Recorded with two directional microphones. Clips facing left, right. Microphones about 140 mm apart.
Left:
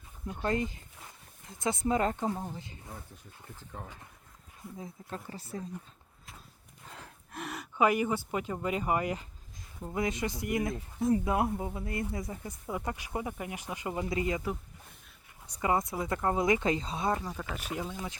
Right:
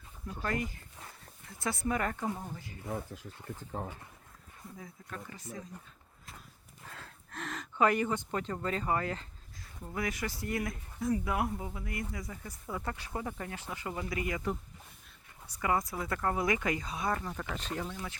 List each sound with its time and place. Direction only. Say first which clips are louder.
0.3 s speech: left 4 dB; 25° left (ahead or behind)
3.8 s speech: right 5 dB; 35° right (ahead or behind)
4.8 s speech: left 4 dB; 30° left (ahead or behind)
6.8 s speech: left 1 dB; 15° left (ahead or behind)
15.4 s speech: left 2 dB; 20° left (ahead or behind)